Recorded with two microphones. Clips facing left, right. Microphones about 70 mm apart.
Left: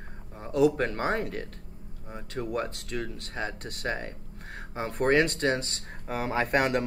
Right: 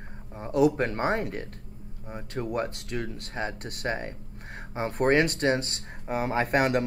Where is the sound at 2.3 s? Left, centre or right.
Right.